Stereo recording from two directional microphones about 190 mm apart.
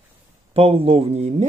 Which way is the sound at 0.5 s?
30° right (ahead or behind).